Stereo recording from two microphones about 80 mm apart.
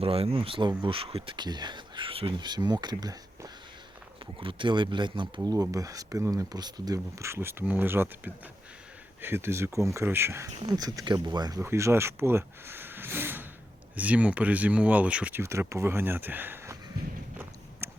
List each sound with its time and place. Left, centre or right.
0.3 s speech: right
4.4 s speech: right
5.5 s speech: right
7.2 s speech: right
7.6 s speech: right
10.7 s speech: right
11.6 s speech: right; by 15.4 s centre
15.4 s speech: right
17.8 s a sound: right